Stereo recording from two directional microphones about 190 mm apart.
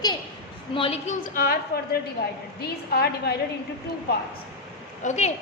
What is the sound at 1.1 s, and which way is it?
Speech, 50° left (ahead or behind).